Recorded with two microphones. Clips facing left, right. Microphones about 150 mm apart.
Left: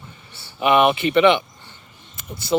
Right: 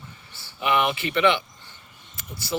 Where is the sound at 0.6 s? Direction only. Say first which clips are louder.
Left 7 dB; 20° left (ahead or behind).